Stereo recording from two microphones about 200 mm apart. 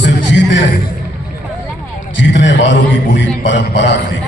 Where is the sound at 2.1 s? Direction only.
65° left (ahead or behind).